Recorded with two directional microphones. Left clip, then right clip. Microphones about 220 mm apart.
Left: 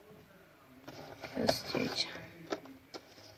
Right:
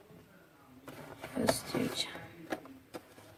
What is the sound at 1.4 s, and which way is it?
Speech, 5° right (ahead or behind).